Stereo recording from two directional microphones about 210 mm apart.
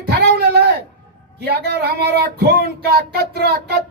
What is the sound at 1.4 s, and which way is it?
Speech, 50° right (ahead or behind).